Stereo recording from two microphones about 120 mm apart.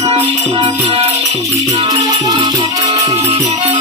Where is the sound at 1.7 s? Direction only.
35° right (ahead or behind).